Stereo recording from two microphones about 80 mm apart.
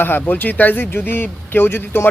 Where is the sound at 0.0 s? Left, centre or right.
Left.